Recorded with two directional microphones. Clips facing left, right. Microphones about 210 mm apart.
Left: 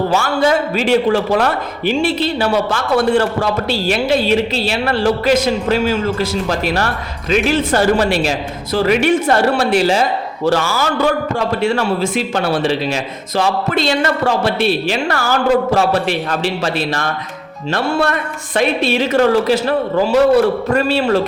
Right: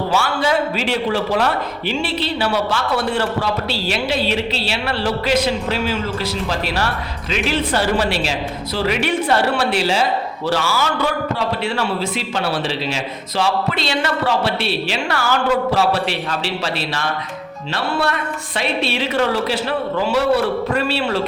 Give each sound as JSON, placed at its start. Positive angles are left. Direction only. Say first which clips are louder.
{"t": 0.1, "sound": "a man's voice", "louder": "left 4 dB", "side_deg": 45}